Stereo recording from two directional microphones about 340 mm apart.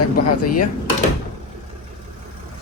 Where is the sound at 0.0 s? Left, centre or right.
Left.